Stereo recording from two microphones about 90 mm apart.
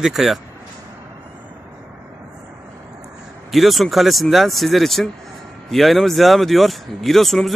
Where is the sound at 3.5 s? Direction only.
Centre (ahead or behind).